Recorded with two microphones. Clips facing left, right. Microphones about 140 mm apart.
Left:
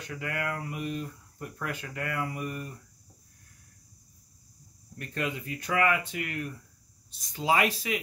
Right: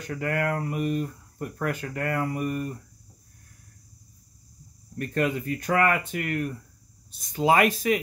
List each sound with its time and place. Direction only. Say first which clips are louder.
0.1 s speech: right 7 dB; 45° right (ahead or behind)
4.9 s speech: right 7 dB; 50° right (ahead or behind)